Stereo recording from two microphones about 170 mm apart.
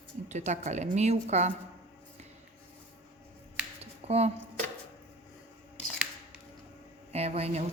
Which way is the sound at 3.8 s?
40° right (ahead or behind).